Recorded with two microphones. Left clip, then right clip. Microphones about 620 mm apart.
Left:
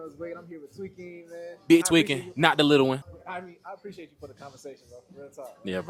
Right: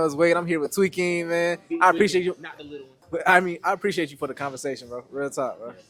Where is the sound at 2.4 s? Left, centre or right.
Left.